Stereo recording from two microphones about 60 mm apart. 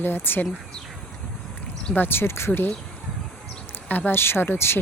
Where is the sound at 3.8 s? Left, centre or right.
Left.